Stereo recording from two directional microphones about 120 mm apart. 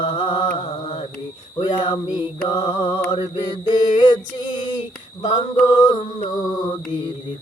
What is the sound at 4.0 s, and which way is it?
Music, 40° left (ahead or behind).